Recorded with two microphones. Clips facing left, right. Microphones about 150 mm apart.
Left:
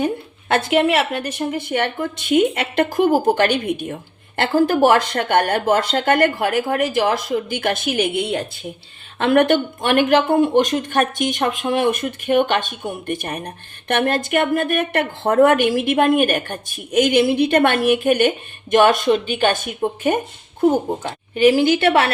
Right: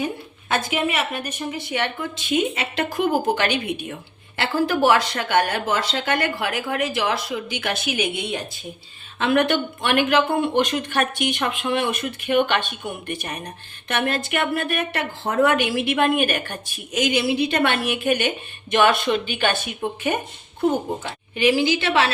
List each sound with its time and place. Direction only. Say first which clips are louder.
0.0 s a woman's voice: left 5 dB; 65° left (ahead or behind); by 1.5 s 80° left
1.5 s speech: left 4 dB; 55° left (ahead or behind)